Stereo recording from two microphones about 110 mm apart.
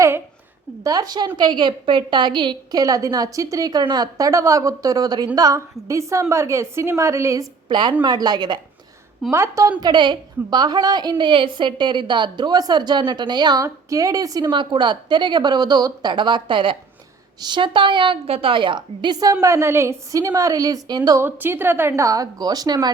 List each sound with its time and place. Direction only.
0.9 s a woman's voice: 35° right (ahead or behind)
7.7 s a woman's voice: 45° right (ahead or behind)
9.3 s a woman's voice: 25° right (ahead or behind)
9.8 s a woman's voice: 45° right (ahead or behind)
14.5 s a woman's voice: 45° right (ahead or behind)
19.2 s a woman's voice: 30° right (ahead or behind)
21.2 s a woman's voice: 20° right (ahead or behind); by 22.9 s 35° right (ahead or behind)